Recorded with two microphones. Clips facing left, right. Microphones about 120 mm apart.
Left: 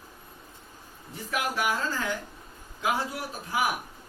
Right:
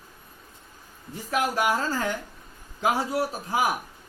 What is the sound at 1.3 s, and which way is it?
Speech, 40° right (ahead or behind).